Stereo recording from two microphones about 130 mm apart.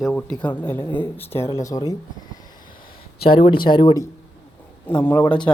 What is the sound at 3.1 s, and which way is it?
Speech, 45° left (ahead or behind).